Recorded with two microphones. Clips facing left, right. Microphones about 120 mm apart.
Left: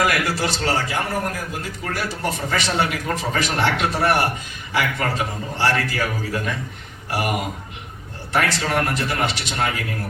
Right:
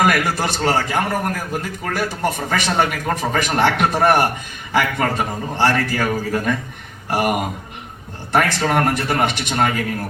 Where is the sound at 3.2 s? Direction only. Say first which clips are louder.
Right 5 dB; 50° right (ahead or behind).